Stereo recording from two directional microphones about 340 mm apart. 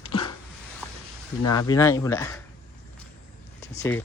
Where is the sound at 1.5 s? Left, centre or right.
Centre.